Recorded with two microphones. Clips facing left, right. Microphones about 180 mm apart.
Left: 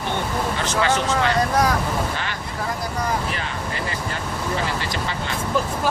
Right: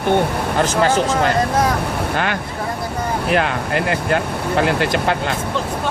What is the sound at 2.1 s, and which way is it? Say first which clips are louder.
Speech: right 8 dB; 60° right (ahead or behind).